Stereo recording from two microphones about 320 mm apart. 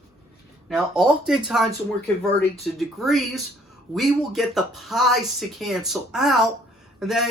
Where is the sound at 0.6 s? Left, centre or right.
Centre.